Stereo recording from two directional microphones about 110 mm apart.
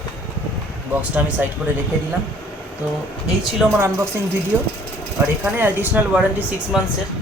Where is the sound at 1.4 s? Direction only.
15° right (ahead or behind).